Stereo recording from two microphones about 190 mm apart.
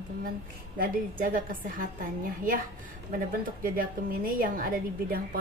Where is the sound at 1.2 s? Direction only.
45° right (ahead or behind).